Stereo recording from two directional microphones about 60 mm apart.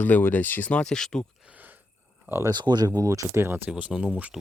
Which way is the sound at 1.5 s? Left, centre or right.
Right.